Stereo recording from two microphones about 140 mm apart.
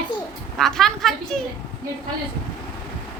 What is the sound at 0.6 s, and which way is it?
Speech, 5° left (ahead or behind).